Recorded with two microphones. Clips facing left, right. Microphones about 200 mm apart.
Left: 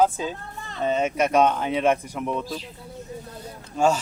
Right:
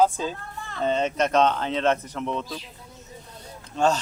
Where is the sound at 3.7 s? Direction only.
10° left (ahead or behind).